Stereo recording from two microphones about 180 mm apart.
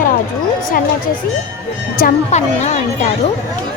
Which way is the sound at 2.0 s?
45° left (ahead or behind).